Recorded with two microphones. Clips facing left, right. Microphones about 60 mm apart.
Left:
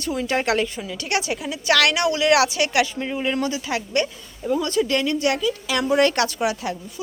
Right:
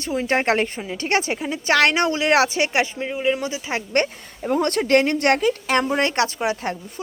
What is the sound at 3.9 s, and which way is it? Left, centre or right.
A woman's voice, right.